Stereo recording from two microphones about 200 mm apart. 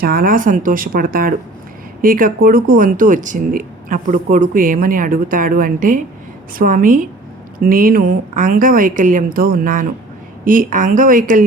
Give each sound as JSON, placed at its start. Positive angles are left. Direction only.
{"t": 0.0, "sound": "a woman's voice", "side_deg": -45}